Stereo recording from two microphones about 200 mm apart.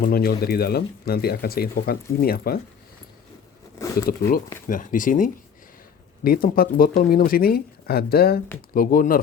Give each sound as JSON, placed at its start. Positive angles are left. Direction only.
{"t": 0.0, "sound": "speech", "side_deg": 50}
{"t": 3.8, "sound": "a sound", "side_deg": 15}
{"t": 4.7, "sound": "speech", "side_deg": 40}